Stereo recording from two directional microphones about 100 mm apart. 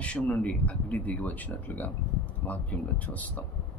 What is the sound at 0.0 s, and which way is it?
Speech, 15° left (ahead or behind).